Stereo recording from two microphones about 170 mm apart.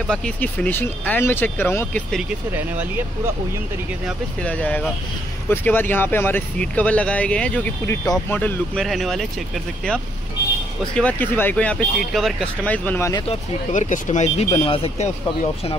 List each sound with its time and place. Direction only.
0.0 s speech: 5° left (ahead or behind)
4.4 s speech: 5° left (ahead or behind)
11.0 s speech: 10° left (ahead or behind)
13.7 s speech: 45° left (ahead or behind)